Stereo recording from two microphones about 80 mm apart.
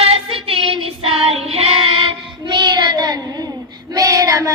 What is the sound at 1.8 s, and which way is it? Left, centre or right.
Child singing, right.